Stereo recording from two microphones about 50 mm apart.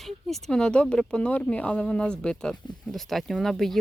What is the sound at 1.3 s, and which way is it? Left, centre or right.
Speech, left.